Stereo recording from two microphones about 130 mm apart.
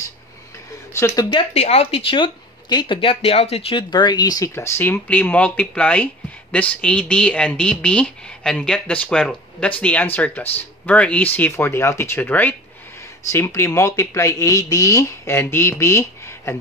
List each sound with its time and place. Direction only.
0.9 s speech: 20° left (ahead or behind)
1.5 s speech: 55° left (ahead or behind)
3.9 s speech: 35° left (ahead or behind)